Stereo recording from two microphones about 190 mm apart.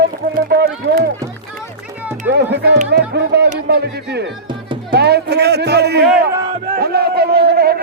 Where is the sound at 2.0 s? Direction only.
10° right (ahead or behind).